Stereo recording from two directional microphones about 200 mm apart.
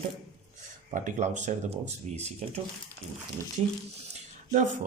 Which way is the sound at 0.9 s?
40° right (ahead or behind).